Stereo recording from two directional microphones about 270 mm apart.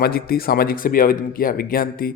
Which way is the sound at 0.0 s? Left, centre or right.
Left.